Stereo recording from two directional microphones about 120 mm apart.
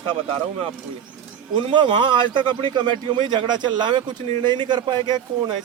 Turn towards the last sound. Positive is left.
turn(degrees=-40)  # may be behind; listen again after turning